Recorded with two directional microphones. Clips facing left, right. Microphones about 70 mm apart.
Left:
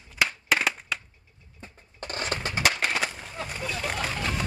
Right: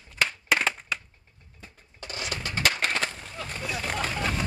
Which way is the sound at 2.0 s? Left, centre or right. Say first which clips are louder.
Left 3 dB; left.